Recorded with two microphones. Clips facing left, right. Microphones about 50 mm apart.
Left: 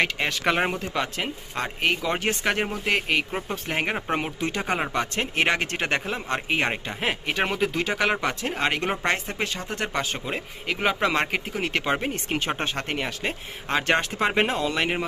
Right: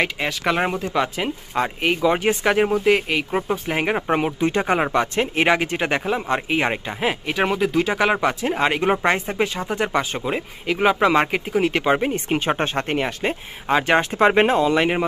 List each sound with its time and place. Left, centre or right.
0.0 s speech: centre
4.4 s speech: right
4.9 s speech: right
5.5 s speech: centre
7.0 s speech: centre
11.8 s speech: centre
12.4 s speech: right
13.7 s speech: centre
14.0 s speech: right
14.6 s speech: right